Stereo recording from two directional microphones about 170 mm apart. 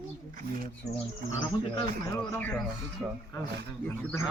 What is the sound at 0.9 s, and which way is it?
Speech, 35° left (ahead or behind).